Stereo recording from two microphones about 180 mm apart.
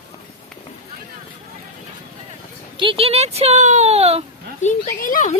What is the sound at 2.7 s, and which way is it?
A child's voice, 30° right (ahead or behind).